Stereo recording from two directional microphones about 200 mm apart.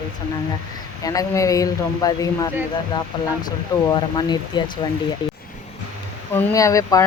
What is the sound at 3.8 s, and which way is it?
Speech, 20° left (ahead or behind).